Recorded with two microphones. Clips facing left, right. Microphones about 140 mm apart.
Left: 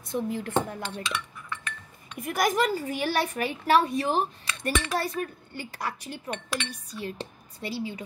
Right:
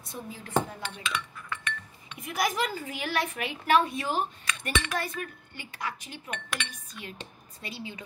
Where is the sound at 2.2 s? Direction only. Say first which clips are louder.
Left 4 dB; 50° left (ahead or behind).